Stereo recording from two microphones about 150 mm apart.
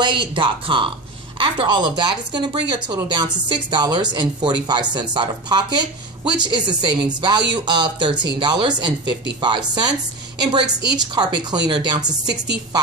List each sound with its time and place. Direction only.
0.0 s speech: 30° right (ahead or behind)
11.0 s speech: 25° right (ahead or behind)